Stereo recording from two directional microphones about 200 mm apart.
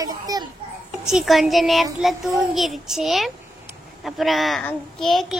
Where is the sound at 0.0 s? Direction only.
20° right (ahead or behind).